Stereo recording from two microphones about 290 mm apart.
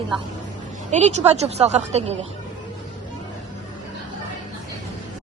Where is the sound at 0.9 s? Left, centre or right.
Right.